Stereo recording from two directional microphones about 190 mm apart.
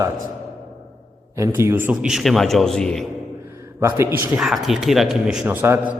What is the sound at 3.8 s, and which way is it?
A man's voice, 15° right (ahead or behind).